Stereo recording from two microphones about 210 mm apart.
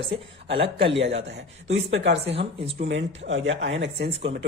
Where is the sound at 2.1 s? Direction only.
30° right (ahead or behind).